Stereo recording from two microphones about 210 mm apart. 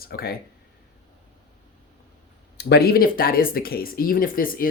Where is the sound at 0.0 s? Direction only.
45° left (ahead or behind).